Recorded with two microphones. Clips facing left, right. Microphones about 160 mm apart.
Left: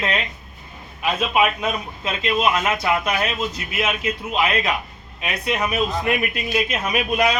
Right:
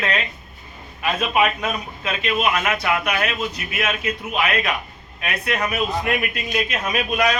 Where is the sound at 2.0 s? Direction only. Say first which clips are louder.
Left 1 dB; 25° left (ahead or behind).